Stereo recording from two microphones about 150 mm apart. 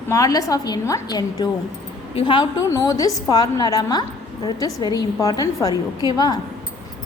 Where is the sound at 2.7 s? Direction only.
25° left (ahead or behind).